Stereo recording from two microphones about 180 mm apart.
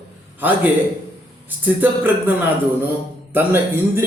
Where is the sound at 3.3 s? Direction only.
10° right (ahead or behind).